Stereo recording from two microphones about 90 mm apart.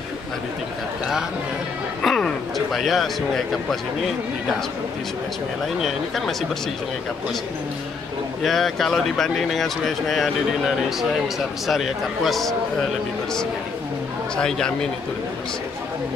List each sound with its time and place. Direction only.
2.0 s a sound: 5° left (ahead or behind)
5.8 s speech: centre (ahead or behind)
8.4 s speech: centre (ahead or behind)
14.3 s speech: 10° left (ahead or behind)